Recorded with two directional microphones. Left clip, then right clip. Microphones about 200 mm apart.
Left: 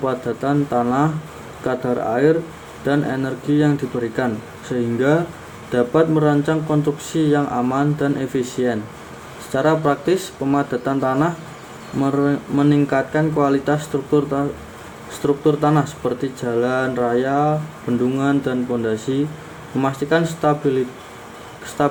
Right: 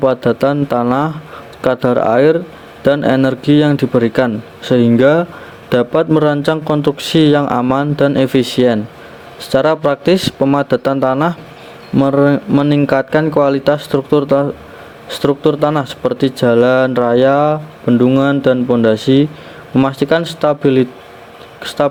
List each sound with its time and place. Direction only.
0.0 s speech: 50° right (ahead or behind)